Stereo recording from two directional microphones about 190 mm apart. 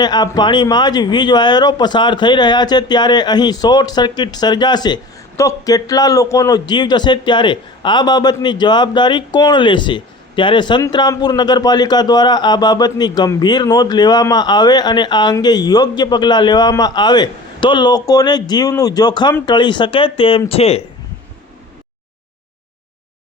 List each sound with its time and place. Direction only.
0.0 s a man's voice: 20° left (ahead or behind)